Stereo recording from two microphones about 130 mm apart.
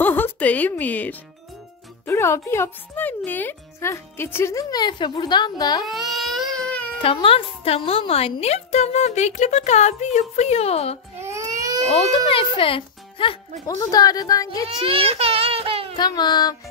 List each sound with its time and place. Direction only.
0.0 s speech: 15° left (ahead or behind); by 5.9 s 30° left (ahead or behind)
5.9 s baby cry: centre (ahead or behind)
7.0 s a woman's voice: 45° left (ahead or behind)
11.1 s baby cry: 25° right (ahead or behind)
12.3 s a child's voice: 45° left (ahead or behind)
13.7 s speech: 30° left (ahead or behind)
14.8 s a sound: 45° right (ahead or behind)
16.0 s a sound: 35° left (ahead or behind)